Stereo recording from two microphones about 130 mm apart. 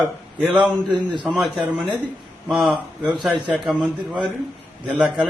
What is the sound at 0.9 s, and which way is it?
Speech, 35° right (ahead or behind).